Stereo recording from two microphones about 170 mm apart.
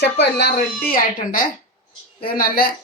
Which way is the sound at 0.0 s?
75° left (ahead or behind).